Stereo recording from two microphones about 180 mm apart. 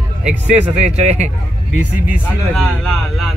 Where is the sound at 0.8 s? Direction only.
40° right (ahead or behind).